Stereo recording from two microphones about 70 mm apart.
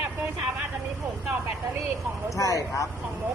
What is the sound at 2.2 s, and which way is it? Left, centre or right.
Speech, left.